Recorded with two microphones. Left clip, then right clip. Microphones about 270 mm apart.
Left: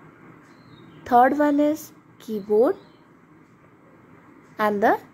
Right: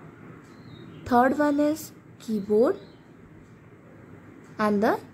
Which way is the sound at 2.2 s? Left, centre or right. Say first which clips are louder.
Left 3 dB; left.